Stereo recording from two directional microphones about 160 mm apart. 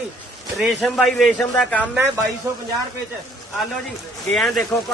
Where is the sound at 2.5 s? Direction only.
20° right (ahead or behind).